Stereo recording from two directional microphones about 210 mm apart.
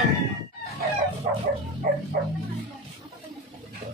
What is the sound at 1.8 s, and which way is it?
Bow-wow, 40° right (ahead or behind).